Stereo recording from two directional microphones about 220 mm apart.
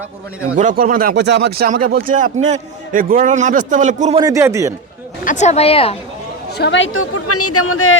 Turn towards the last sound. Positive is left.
turn(degrees=70)  # may be behind; listen again after turning